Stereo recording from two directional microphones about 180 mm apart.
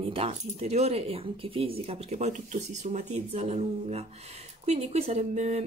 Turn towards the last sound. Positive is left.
turn(degrees=-40)  # may be behind; listen again after turning